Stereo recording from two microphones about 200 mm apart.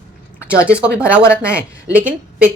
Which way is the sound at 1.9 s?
5° right (ahead or behind).